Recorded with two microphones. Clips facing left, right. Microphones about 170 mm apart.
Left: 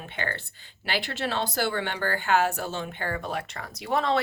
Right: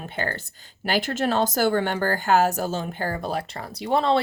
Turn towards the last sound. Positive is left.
turn(degrees=-30)  # may be behind; listen again after turning